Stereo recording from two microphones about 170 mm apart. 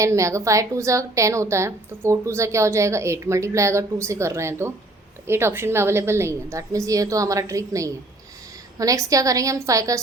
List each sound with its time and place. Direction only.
0.0 s a woman's voice: 20° right (ahead or behind)